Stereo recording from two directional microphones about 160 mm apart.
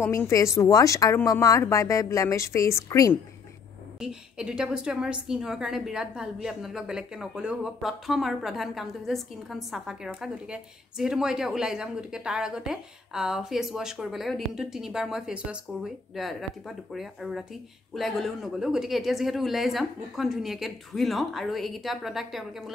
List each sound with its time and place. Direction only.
0.0 s a woman's voice: 15° left (ahead or behind)
4.0 s a woman's voice: 5° right (ahead or behind)